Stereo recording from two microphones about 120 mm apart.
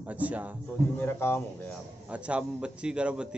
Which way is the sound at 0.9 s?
20° left (ahead or behind).